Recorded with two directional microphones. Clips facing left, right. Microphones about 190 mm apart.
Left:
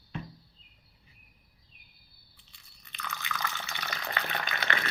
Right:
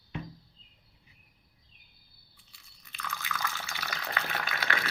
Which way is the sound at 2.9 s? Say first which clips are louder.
Even; 5° right (ahead or behind).